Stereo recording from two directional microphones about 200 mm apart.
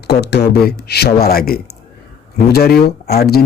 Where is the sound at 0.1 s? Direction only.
55° left (ahead or behind).